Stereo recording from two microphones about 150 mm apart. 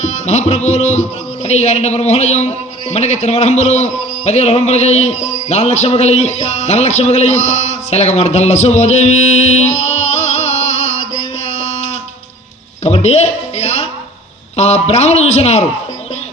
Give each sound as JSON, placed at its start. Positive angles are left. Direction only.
{"t": 0.0, "sound": "music", "side_deg": 45}
{"t": 1.5, "sound": "a man's voice", "side_deg": 45}
{"t": 12.8, "sound": "a sound", "side_deg": 45}
{"t": 14.5, "sound": "a man's voice", "side_deg": 45}